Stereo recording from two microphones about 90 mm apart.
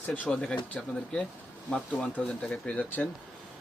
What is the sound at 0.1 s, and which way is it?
Speech, 10° left (ahead or behind).